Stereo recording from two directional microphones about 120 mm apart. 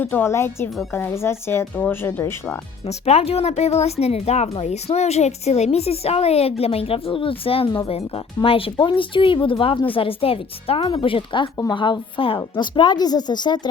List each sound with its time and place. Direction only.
0.0 s speech: 15° left (ahead or behind)
2.8 s a woman's voice: 60° left (ahead or behind); by 13.6 s 35° left (ahead or behind)